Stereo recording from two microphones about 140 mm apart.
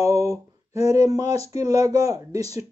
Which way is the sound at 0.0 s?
25° right (ahead or behind).